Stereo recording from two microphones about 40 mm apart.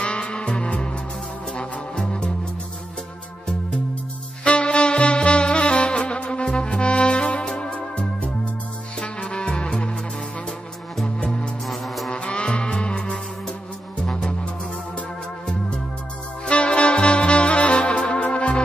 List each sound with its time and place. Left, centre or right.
0.0 s music: left
4.5 s music: left
7.7 s music: left
9.2 s music: left
11.2 s music: left
11.6 s music: centre
12.1 s music: left
16.4 s saxophone: left